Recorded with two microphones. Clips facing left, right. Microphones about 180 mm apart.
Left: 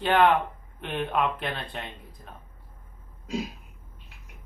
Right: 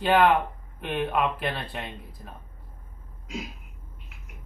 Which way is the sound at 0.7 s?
5° right (ahead or behind).